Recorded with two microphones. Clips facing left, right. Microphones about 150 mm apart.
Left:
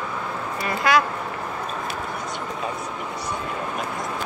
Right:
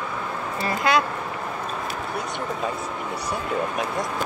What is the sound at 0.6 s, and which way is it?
Speech, 25° right (ahead or behind).